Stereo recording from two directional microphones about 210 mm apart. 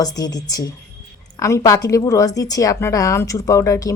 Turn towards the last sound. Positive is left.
turn(degrees=15)  # may be behind; listen again after turning